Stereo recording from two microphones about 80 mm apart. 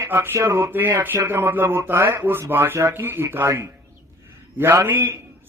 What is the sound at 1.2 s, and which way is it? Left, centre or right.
A man's voice, right.